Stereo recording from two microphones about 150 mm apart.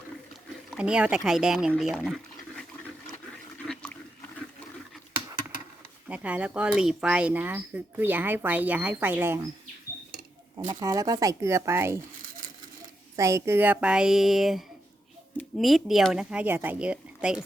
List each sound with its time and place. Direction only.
0.8 s speech: 5° right (ahead or behind)
3.6 s a sound: centre (ahead or behind)
6.1 s speech: 10° right (ahead or behind)
10.7 s speech: 20° right (ahead or behind)
13.1 s a woman's voice: 20° right (ahead or behind)